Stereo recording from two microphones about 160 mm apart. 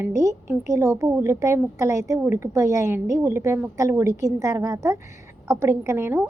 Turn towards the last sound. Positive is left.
turn(degrees=-15)  # may be behind; listen again after turning